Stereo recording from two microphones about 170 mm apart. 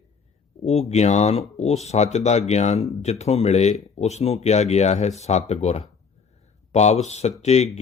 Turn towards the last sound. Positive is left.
turn(degrees=40)  # may be behind; listen again after turning